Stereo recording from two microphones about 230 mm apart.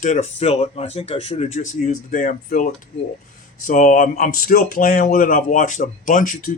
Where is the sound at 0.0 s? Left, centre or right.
Left.